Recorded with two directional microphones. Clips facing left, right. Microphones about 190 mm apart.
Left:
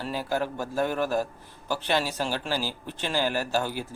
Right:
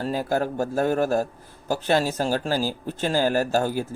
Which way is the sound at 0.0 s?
45° right (ahead or behind).